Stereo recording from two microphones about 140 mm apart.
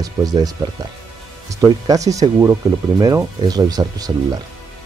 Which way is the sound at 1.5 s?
25° right (ahead or behind).